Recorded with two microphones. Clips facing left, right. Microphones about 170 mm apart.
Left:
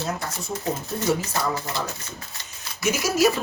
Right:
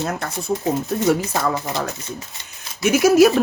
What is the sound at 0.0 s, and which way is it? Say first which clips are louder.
Speech: right 4 dB; 60° right (ahead or behind).